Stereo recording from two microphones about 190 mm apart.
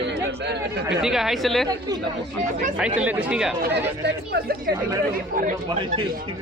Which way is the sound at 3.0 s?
10° right (ahead or behind).